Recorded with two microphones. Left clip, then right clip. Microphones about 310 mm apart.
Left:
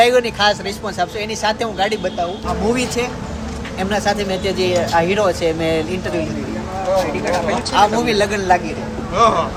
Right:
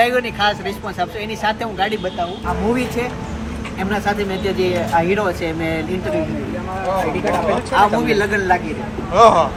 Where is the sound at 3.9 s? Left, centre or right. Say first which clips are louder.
Left 2 dB; left.